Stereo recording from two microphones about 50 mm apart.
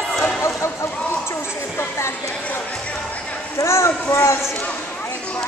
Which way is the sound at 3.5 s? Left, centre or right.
Left.